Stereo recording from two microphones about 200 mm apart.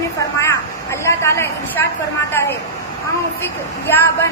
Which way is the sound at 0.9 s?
15° left (ahead or behind).